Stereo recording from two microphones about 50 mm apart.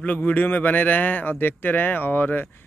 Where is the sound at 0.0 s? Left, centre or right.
Left.